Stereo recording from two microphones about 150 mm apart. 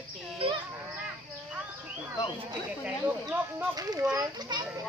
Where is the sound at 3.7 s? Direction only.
25° right (ahead or behind).